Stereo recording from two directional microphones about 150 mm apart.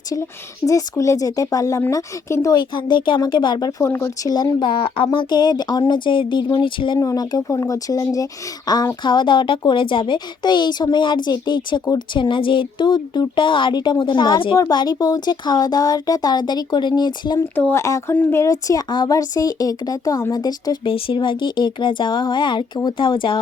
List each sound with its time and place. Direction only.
0.6 s speech: 20° left (ahead or behind)
2.6 s speech: 30° left (ahead or behind)
17.5 s speech: 15° left (ahead or behind); by 23.4 s 35° left (ahead or behind)